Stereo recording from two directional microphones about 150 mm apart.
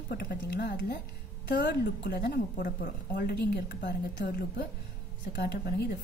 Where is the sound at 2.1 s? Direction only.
70° left (ahead or behind); by 3.8 s 90° left.